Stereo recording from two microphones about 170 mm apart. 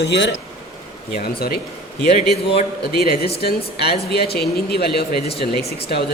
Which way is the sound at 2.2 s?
40° left (ahead or behind).